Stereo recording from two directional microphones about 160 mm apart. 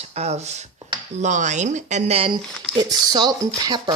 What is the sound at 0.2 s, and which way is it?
Speech, 40° right (ahead or behind).